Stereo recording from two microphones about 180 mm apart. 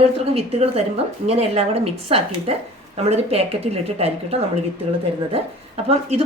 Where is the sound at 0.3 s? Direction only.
35° right (ahead or behind).